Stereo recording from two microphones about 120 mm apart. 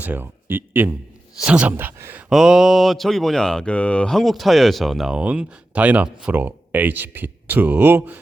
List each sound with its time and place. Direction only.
0.0 s speech: 15° right (ahead or behind)
2.3 s speech: 5° right (ahead or behind)